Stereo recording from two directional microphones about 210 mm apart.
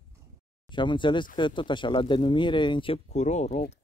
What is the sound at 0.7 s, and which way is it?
Speech, 20° left (ahead or behind).